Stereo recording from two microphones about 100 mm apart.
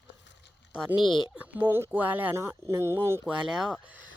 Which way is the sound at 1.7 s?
20° right (ahead or behind).